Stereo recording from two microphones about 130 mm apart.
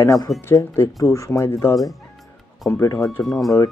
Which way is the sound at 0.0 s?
25° left (ahead or behind).